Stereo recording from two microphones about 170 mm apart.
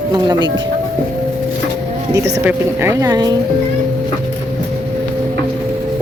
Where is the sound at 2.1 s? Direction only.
15° right (ahead or behind).